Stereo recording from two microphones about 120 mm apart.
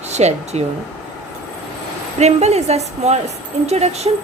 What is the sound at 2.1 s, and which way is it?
A woman's voice, 65° right (ahead or behind).